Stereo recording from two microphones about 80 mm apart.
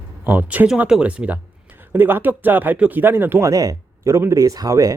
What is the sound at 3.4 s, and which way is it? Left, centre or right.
Speech, right.